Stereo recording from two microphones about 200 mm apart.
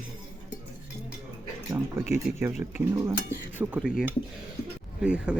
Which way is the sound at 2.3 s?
5° right (ahead or behind).